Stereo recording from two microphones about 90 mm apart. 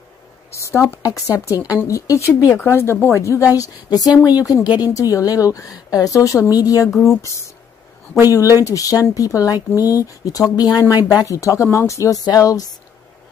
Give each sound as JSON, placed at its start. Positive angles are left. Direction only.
{"t": 0.5, "sound": "speech", "side_deg": 35}